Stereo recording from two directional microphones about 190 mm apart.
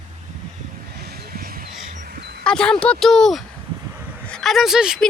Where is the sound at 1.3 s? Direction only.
50° right (ahead or behind).